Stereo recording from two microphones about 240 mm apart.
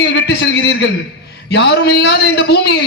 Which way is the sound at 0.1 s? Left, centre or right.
Left.